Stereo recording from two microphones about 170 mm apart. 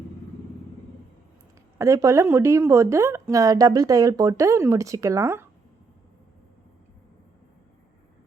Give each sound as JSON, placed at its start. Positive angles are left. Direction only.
{"t": 1.8, "sound": "speech", "side_deg": -20}